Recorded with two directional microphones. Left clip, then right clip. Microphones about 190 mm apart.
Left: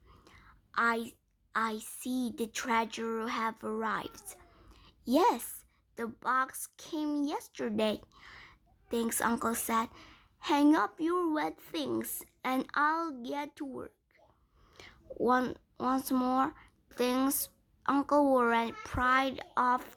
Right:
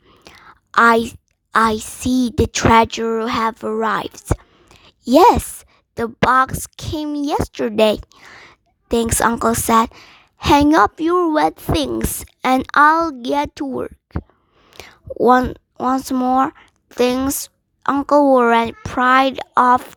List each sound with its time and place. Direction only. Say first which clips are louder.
0.3 s whispering: right 19 dB; 45° right (ahead or behind)
1.5 s a woman's voice: right 18 dB; 45° right (ahead or behind)